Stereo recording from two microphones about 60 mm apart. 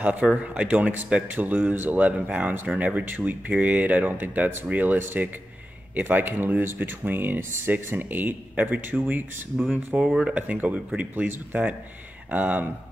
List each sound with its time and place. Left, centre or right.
0.0 s speech: right
10.0 s speech: centre
10.3 s speech: right